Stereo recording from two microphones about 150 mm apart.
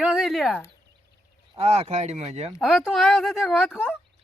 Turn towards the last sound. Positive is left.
turn(degrees=0)  # may be behind; listen again after turning